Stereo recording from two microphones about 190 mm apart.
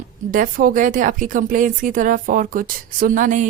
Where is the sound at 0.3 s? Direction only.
45° right (ahead or behind).